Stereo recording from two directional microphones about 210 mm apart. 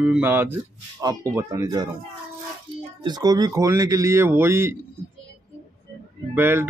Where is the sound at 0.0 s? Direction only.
10° right (ahead or behind).